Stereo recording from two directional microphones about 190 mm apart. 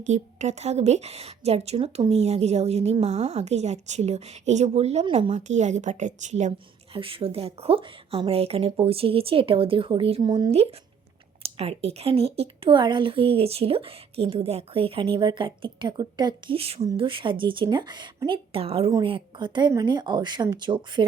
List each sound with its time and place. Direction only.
0.0 s a woman's voice: 40° right (ahead or behind)
6.9 s speech: 30° right (ahead or behind)
10.5 s a woman's voice: 30° right (ahead or behind)